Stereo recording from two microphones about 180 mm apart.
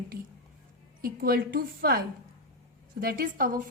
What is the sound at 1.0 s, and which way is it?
A woman's voice, 55° right (ahead or behind).